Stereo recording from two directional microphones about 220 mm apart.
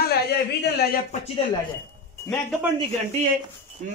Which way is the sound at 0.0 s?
45° left (ahead or behind).